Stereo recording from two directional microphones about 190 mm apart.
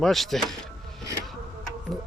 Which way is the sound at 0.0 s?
Centre (ahead or behind).